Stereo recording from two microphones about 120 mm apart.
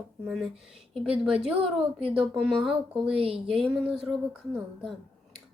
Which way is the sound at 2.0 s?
50° right (ahead or behind).